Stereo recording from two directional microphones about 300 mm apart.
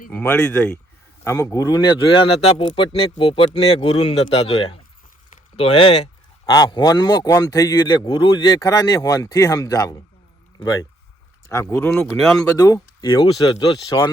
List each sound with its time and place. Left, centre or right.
0.1 s a man's voice: centre
11.4 s a man's voice: centre